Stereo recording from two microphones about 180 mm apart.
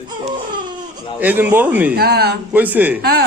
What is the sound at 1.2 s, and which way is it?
Speech, 10° right (ahead or behind).